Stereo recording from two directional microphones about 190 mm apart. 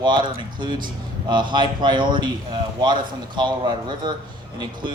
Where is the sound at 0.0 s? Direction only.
25° right (ahead or behind).